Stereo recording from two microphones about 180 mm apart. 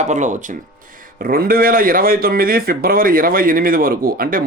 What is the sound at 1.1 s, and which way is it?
Speech, 55° right (ahead or behind).